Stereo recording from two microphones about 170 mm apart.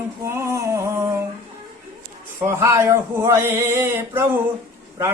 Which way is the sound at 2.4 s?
15° right (ahead or behind).